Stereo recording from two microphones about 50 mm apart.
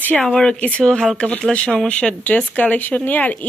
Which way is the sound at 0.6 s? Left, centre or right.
Left.